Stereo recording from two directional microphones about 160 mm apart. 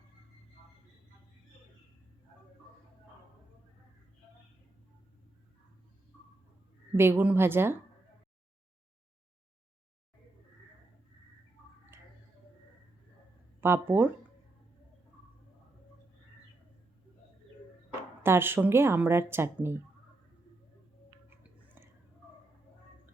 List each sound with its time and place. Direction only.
6.9 s speech: 15° right (ahead or behind)
11.9 s a sound: 15° right (ahead or behind)
13.6 s speech: 15° right (ahead or behind)
18.2 s speech: 15° right (ahead or behind)